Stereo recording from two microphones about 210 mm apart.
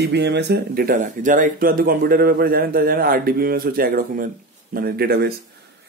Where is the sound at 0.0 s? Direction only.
55° right (ahead or behind).